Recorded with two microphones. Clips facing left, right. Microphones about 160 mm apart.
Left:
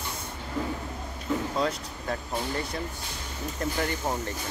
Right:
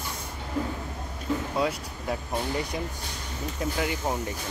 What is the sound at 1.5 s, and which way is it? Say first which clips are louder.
Speech: right 1 dB; 10° right (ahead or behind).